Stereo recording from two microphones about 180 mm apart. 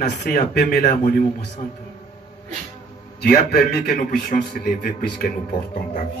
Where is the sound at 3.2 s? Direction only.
60° left (ahead or behind).